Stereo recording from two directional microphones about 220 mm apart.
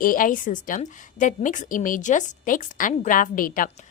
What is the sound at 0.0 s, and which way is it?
A woman's voice, 40° left (ahead or behind).